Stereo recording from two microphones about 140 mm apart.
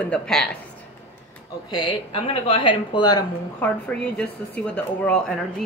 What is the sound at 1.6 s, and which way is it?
Speech, 35° left (ahead or behind).